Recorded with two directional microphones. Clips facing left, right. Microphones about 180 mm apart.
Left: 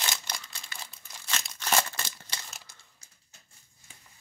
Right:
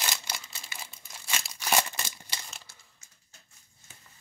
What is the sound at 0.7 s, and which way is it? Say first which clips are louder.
Crumpling: right 1 dB; 10° right (ahead or behind).